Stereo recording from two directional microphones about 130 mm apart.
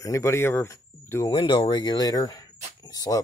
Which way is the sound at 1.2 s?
35° left (ahead or behind).